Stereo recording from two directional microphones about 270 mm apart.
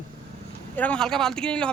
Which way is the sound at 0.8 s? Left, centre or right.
Centre.